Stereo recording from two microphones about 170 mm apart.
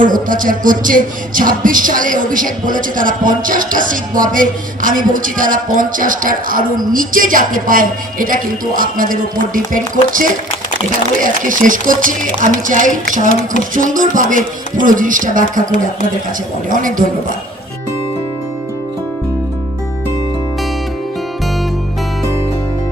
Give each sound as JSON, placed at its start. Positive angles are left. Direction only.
{"t": 0.0, "sound": "speech", "side_deg": -50}
{"t": 16.6, "sound": "speech", "side_deg": -50}